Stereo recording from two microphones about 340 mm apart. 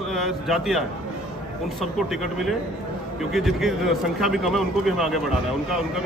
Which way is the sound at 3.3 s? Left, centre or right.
Centre.